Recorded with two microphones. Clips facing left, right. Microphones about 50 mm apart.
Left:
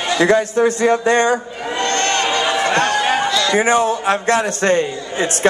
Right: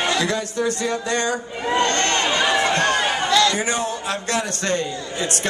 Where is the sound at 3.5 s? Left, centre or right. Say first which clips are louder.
Left 7 dB; left.